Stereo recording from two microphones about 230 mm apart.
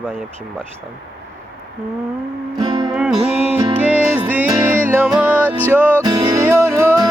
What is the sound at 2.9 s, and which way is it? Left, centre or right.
Music, centre.